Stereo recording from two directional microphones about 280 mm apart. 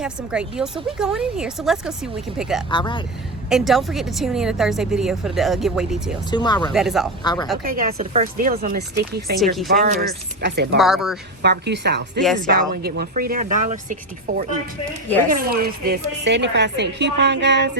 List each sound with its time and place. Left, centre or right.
0.0 s a woman's voice: centre
2.6 s speech: centre
3.5 s a woman's voice: centre
6.3 s speech: centre
6.7 s a woman's voice: centre
7.6 s a woman's voice: right
10.8 s a woman's voice: centre
11.4 s a woman's voice: right